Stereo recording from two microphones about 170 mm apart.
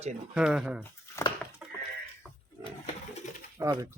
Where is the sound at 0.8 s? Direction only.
15° left (ahead or behind).